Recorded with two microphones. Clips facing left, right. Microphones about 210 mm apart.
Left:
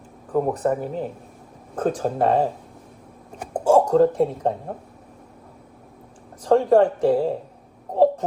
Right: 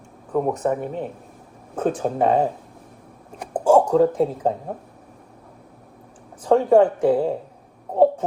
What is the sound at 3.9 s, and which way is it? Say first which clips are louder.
Speech: even; 5° right (ahead or behind).